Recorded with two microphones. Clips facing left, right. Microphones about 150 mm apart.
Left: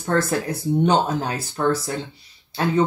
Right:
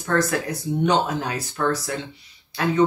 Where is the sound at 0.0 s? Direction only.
30° left (ahead or behind).